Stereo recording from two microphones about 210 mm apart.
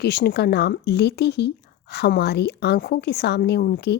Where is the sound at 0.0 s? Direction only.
50° left (ahead or behind).